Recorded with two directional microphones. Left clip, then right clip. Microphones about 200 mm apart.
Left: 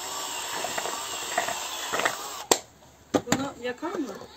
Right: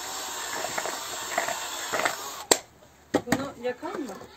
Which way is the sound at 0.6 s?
10° left (ahead or behind).